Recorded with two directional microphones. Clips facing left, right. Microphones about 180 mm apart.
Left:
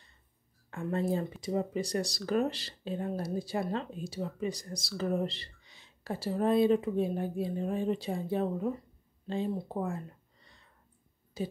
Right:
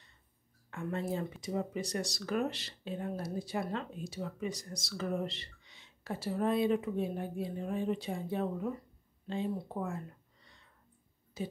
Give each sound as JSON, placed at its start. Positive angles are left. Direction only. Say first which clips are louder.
{"t": 0.7, "sound": "speech", "louder": "left 5 dB", "side_deg": 35}